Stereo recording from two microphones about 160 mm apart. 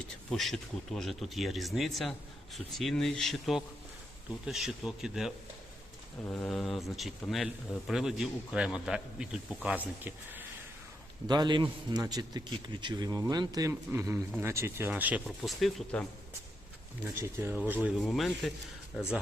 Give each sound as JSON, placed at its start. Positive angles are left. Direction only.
{"t": 0.3, "sound": "speech", "side_deg": 5}
{"t": 11.3, "sound": "a man's voice", "side_deg": -30}
{"t": 15.4, "sound": "speech", "side_deg": 0}
{"t": 17.4, "sound": "speech", "side_deg": -10}